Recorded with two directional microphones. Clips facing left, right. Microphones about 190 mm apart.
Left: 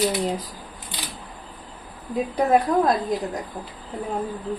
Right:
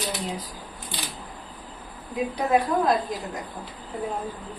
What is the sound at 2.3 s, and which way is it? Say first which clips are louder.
Speech: left 4 dB; 45° left (ahead or behind).